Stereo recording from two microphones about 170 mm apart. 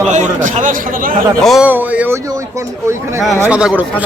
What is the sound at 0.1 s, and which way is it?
A man's voice, 45° right (ahead or behind).